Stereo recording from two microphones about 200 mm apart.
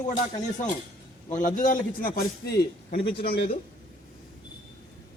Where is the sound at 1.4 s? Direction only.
40° left (ahead or behind).